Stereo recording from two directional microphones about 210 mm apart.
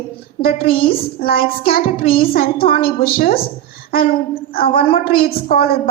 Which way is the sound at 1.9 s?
25° left (ahead or behind).